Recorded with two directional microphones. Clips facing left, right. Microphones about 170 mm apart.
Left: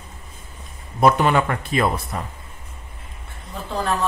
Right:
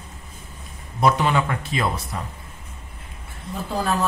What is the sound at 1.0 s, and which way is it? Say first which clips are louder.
Speech: left 3 dB; 55° left (ahead or behind).